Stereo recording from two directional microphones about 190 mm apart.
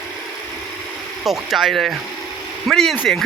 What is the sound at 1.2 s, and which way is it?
A man's voice, centre (ahead or behind).